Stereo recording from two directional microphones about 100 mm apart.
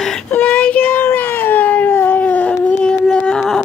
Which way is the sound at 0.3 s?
15° left (ahead or behind).